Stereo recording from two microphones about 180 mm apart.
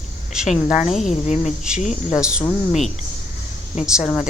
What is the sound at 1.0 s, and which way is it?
Speech, 40° left (ahead or behind).